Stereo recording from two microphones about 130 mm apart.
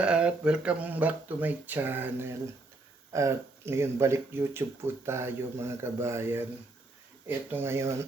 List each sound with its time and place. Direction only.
0.0 s speech: 10° right (ahead or behind)